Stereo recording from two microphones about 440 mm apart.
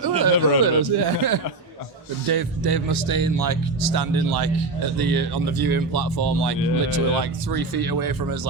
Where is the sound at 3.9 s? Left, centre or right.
Right.